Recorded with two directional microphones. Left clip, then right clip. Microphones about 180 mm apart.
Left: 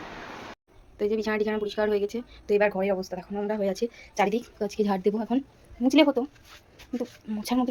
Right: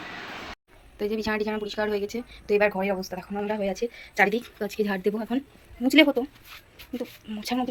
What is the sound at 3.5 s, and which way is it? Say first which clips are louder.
Speech: left 1 dB; 15° left (ahead or behind).